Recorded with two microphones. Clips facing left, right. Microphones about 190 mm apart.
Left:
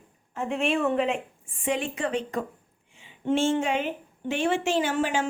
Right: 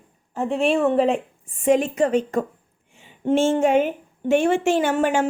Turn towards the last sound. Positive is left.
turn(degrees=-55)  # may be behind; listen again after turning